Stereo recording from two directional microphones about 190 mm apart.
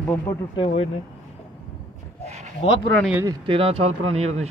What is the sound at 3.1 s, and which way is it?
Speech, 15° right (ahead or behind).